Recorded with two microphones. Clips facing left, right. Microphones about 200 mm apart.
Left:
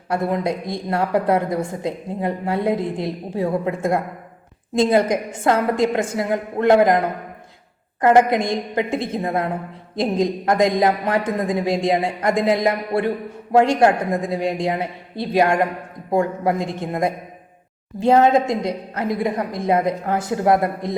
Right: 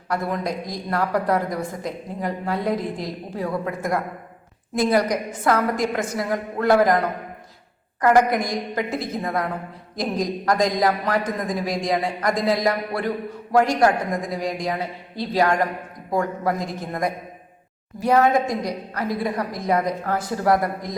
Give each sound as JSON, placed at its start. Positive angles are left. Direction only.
{"t": 0.1, "sound": "a woman's voice", "side_deg": 25}
{"t": 8.0, "sound": "a woman's voice", "side_deg": 25}